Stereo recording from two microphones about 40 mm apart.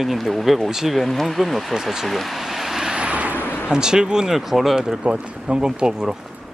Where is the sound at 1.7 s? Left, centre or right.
Centre.